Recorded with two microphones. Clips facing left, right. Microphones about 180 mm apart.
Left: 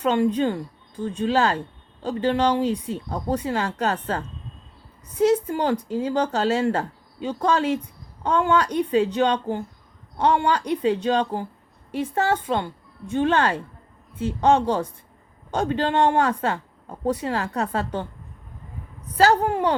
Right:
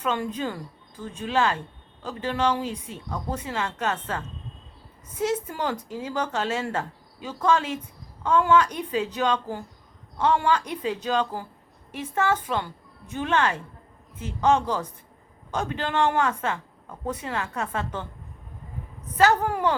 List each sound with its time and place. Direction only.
0.0 s speech: 30° left (ahead or behind)
19.1 s speech: 35° left (ahead or behind)